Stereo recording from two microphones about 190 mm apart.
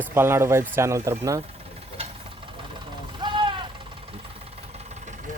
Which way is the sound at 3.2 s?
25° right (ahead or behind).